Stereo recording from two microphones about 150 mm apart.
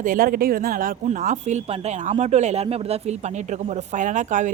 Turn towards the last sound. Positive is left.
turn(degrees=-55)  # may be behind; listen again after turning